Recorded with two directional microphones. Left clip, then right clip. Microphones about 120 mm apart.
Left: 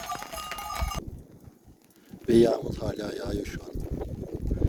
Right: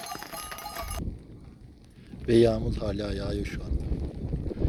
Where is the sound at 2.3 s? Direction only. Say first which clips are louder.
Even; 45° left (ahead or behind).